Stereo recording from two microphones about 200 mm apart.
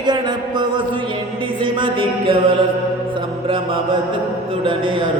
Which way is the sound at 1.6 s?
25° right (ahead or behind).